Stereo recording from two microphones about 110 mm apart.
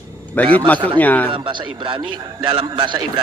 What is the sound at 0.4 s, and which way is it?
Speech, 15° left (ahead or behind).